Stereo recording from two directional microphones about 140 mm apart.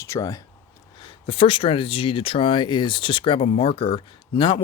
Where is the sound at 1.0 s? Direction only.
40° left (ahead or behind).